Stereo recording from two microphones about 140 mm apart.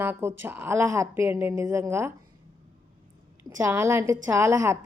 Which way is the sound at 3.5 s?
20° right (ahead or behind).